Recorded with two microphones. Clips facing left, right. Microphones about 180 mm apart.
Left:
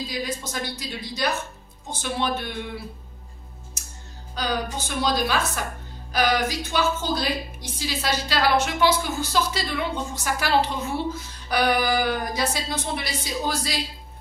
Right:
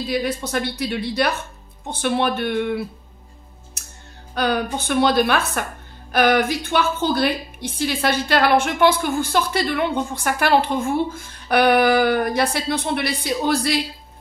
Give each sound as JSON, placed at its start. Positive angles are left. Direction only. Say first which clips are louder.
{"t": 0.0, "sound": "a woman's voice", "louder": "right 7 dB", "side_deg": -60}
{"t": 4.4, "sound": "a woman's voice", "louder": "right 6 dB", "side_deg": -60}